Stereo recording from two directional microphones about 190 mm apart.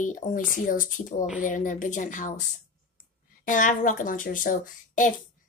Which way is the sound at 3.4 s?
45° left (ahead or behind).